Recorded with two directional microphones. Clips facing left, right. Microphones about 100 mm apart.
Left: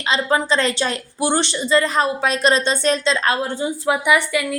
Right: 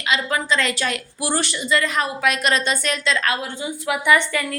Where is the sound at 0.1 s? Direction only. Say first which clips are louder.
Left 3 dB; 30° left (ahead or behind).